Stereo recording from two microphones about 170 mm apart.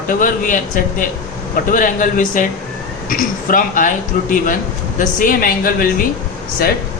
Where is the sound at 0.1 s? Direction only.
50° left (ahead or behind).